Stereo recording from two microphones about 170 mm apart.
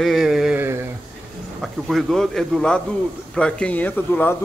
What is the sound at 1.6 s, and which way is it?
A man's voice, centre (ahead or behind).